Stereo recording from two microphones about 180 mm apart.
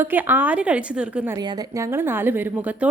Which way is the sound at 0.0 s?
10° right (ahead or behind).